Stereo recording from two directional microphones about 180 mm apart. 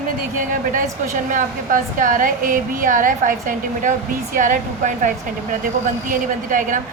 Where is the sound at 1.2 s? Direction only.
50° right (ahead or behind).